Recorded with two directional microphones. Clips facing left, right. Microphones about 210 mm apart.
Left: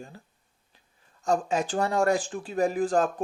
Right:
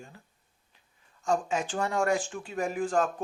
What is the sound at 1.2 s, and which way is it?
Speech, 35° left (ahead or behind).